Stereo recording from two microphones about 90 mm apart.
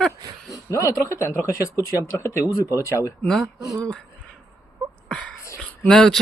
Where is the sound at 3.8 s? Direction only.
15° left (ahead or behind).